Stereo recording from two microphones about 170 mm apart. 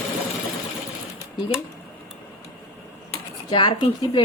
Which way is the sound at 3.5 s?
30° left (ahead or behind).